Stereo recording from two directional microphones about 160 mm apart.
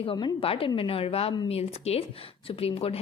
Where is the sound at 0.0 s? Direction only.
35° left (ahead or behind).